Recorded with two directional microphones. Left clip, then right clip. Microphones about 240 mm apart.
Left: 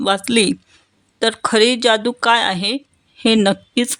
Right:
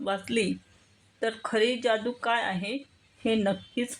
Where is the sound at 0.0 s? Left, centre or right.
Left.